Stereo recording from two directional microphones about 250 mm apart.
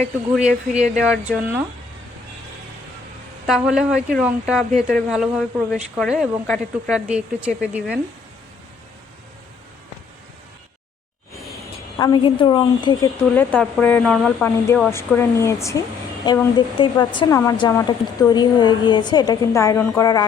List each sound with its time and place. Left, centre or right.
0.3 s a woman's voice: centre
3.4 s a woman's voice: centre
11.9 s speech: centre